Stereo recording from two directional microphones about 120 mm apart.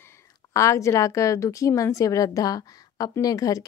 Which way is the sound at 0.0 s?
20° left (ahead or behind).